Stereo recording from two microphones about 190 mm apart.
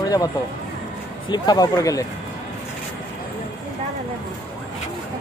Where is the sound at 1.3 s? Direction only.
20° left (ahead or behind).